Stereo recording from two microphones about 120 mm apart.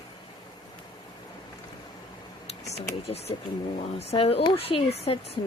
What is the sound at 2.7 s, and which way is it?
A woman's voice, 60° left (ahead or behind).